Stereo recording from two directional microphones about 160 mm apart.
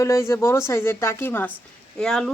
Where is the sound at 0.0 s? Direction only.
20° left (ahead or behind).